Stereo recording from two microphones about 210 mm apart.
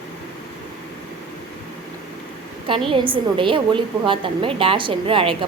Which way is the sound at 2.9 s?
25° right (ahead or behind).